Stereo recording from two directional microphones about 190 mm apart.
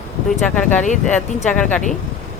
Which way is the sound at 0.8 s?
40° left (ahead or behind).